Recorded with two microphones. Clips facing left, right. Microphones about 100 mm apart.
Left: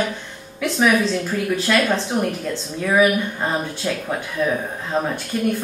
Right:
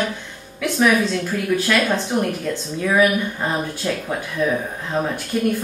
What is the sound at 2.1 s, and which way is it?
Speech, 5° left (ahead or behind).